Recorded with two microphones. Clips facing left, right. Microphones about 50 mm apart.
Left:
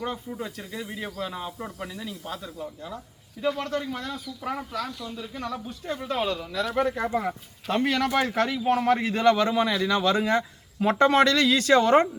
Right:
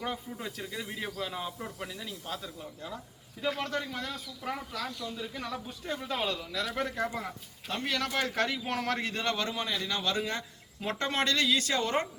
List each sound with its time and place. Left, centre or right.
0.0 s speech: centre
1.5 s speech: centre
1.8 s speech: centre
4.4 s speech: centre
7.1 s a man's voice: left
8.0 s speech: left
9.1 s a man's voice: left